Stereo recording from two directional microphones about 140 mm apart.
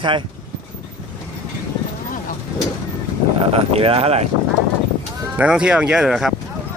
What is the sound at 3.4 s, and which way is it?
Speech, 45° right (ahead or behind).